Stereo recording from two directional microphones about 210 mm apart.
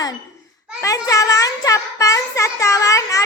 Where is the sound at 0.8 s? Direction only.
15° left (ahead or behind).